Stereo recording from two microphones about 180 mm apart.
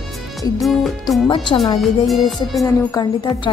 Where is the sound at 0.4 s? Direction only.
Centre (ahead or behind).